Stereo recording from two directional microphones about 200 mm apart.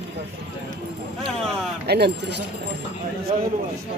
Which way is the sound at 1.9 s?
55° right (ahead or behind).